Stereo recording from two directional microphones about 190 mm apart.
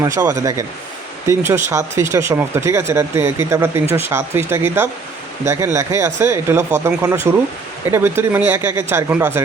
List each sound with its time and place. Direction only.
0.3 s speech: 15° right (ahead or behind)